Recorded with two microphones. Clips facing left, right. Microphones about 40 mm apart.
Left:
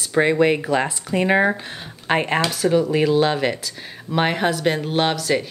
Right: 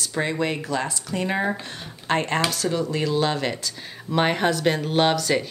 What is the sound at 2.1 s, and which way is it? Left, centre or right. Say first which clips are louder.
Speech: left 3 dB; centre.